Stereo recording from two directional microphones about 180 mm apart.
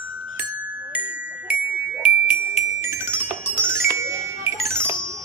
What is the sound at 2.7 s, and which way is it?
Music, 15° right (ahead or behind).